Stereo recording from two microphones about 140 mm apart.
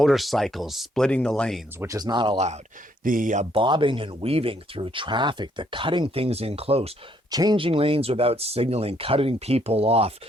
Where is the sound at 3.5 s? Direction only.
35° right (ahead or behind).